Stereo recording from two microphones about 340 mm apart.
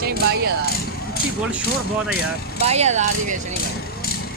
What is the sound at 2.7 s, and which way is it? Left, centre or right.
Speech, centre.